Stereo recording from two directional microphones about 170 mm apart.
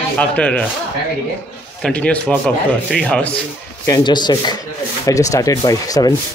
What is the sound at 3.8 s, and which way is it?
Speech, 20° left (ahead or behind).